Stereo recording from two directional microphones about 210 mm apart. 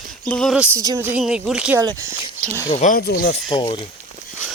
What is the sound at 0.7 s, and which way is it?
A woman's voice, 15° right (ahead or behind).